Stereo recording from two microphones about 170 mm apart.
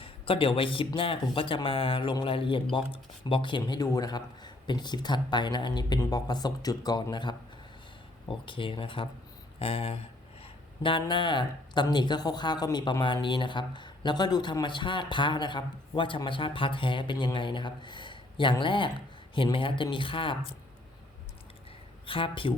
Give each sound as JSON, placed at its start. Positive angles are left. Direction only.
{"t": 0.0, "sound": "speech", "side_deg": 30}
{"t": 10.4, "sound": "a sound", "side_deg": 30}
{"t": 11.0, "sound": "speech", "side_deg": 25}
{"t": 22.0, "sound": "speech", "side_deg": 30}